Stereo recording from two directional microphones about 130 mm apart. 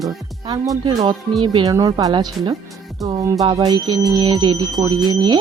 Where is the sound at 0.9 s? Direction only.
25° right (ahead or behind).